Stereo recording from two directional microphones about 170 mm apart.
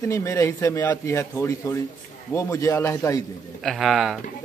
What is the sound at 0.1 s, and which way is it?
Speech, 20° left (ahead or behind).